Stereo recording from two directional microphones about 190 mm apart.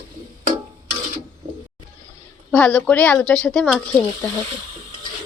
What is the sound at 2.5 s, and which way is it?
Speech, 5° left (ahead or behind).